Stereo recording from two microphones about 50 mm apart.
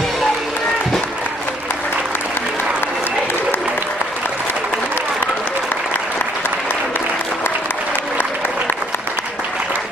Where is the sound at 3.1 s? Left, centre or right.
Left.